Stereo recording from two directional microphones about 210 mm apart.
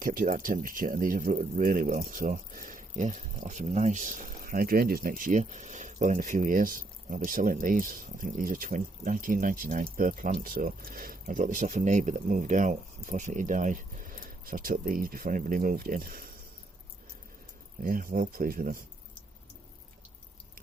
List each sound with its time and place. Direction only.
0.0 s speech: 40° right (ahead or behind)
17.8 s speech: 40° right (ahead or behind)